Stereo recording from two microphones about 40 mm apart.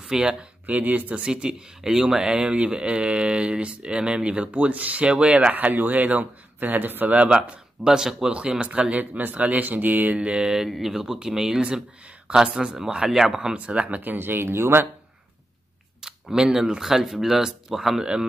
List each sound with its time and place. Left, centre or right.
0.1 s speech: centre
0.7 s speech: right
1.2 s speech: right
5.0 s speech: right
5.5 s speech: right
7.1 s speech: right
7.8 s speech: centre
8.3 s speech: right
9.2 s speech: right
10.1 s speech: right
10.7 s speech: centre
13.7 s speech: right
16.0 s speech: centre